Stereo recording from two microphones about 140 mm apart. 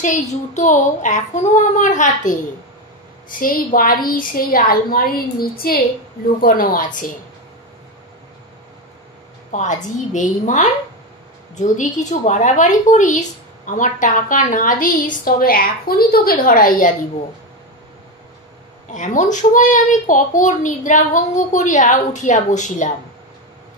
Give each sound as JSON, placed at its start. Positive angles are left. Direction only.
{"t": 0.0, "sound": "speech", "side_deg": 60}
{"t": 3.3, "sound": "a woman's voice", "side_deg": 85}
{"t": 9.5, "sound": "a woman's voice", "side_deg": 60}
{"t": 18.9, "sound": "speech", "side_deg": 60}